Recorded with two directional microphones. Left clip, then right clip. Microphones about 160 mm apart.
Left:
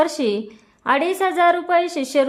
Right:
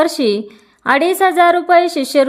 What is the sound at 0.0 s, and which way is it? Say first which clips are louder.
A woman's voice: right 5 dB; 25° right (ahead or behind).